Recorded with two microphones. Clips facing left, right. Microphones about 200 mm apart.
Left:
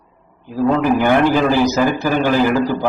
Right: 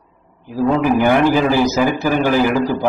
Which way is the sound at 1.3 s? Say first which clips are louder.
Even; 10° right (ahead or behind).